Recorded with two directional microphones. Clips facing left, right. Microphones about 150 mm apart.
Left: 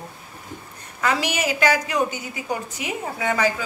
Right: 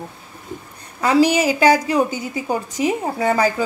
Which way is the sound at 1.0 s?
35° right (ahead or behind).